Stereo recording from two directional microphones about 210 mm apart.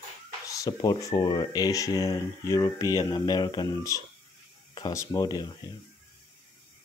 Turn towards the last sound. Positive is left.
turn(degrees=20)  # may be behind; listen again after turning